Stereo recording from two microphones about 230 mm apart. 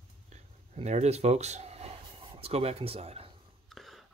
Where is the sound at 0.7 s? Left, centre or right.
Right.